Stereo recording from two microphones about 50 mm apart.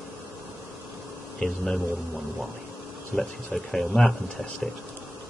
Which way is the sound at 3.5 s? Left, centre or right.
Centre.